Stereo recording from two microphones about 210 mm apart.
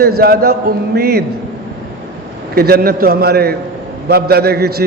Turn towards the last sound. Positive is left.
turn(degrees=-50)  # may be behind; listen again after turning